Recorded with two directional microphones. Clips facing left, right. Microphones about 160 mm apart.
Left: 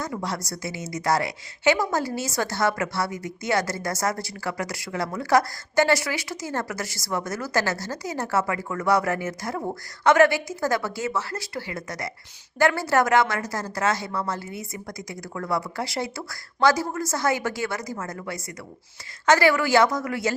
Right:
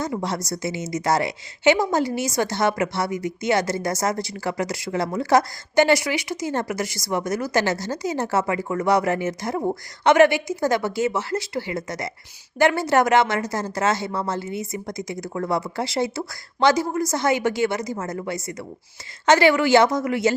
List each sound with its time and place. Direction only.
0.0 s a woman's voice: 25° right (ahead or behind)